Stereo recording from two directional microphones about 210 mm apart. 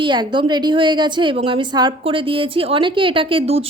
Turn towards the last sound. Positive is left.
turn(degrees=-25)  # may be behind; listen again after turning